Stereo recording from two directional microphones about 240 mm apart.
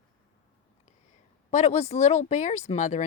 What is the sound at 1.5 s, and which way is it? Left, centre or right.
Speech, left.